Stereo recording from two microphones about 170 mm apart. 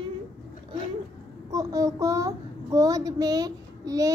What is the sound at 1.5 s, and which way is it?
A child's voice, 20° right (ahead or behind).